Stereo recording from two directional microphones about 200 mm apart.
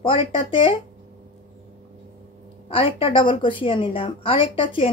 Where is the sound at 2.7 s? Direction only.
25° left (ahead or behind).